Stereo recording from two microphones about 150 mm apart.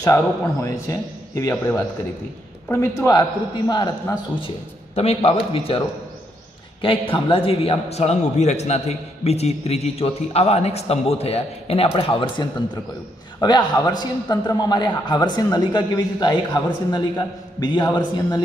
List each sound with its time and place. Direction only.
0.0 s a man's voice: 20° left (ahead or behind)
4.9 s speech: 40° left (ahead or behind)
6.8 s a man's voice: 35° left (ahead or behind)